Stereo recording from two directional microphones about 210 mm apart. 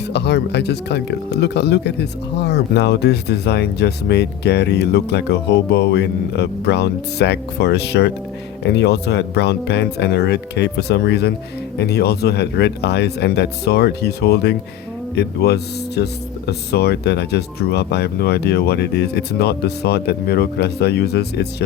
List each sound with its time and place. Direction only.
0.1 s speech: 55° left (ahead or behind)